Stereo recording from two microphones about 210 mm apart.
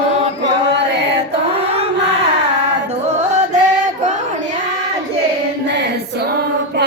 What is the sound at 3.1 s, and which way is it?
Music, 30° right (ahead or behind).